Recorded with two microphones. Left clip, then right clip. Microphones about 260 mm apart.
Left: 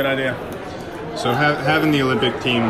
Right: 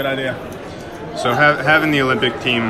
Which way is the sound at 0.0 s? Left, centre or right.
Centre.